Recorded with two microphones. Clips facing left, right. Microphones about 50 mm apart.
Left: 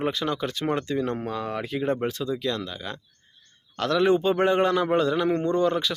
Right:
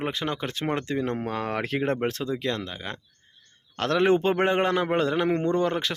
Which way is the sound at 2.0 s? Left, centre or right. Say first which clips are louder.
Even; right.